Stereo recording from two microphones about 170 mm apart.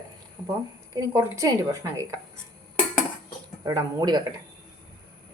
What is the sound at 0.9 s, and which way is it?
Speech, 15° right (ahead or behind).